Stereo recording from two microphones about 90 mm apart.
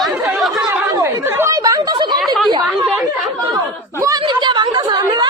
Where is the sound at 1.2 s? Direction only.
25° right (ahead or behind).